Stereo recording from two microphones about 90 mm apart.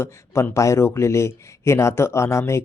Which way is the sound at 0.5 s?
35° left (ahead or behind).